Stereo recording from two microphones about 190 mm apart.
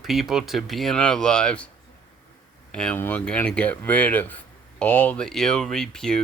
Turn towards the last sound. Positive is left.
turn(degrees=5)  # may be behind; listen again after turning